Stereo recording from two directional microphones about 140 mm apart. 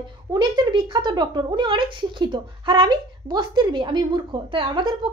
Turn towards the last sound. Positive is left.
turn(degrees=-35)  # may be behind; listen again after turning